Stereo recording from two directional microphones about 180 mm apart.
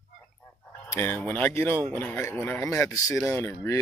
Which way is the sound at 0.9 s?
10° left (ahead or behind).